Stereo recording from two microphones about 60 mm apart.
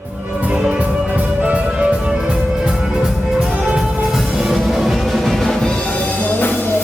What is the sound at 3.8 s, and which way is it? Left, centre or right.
Music, centre.